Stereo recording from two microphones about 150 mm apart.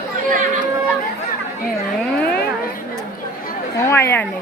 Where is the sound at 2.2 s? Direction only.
10° left (ahead or behind).